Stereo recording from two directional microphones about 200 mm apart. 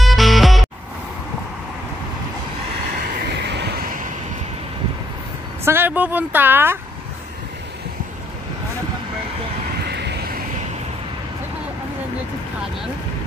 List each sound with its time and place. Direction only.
0.0 s music: centre (ahead or behind)
3.3 s vehicle: 60° right (ahead or behind)
5.7 s speech: 10° right (ahead or behind)
9.8 s vehicle: 55° right (ahead or behind)